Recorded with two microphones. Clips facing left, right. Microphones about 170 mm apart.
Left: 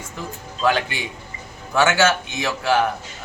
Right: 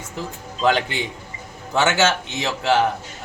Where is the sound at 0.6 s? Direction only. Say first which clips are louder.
Right 1 dB; 20° right (ahead or behind).